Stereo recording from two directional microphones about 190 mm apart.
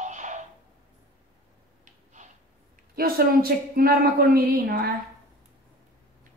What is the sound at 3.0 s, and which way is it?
Speech, 50° right (ahead or behind).